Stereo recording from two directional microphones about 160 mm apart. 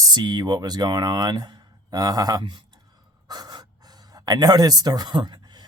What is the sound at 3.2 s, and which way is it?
Gasp, 25° right (ahead or behind).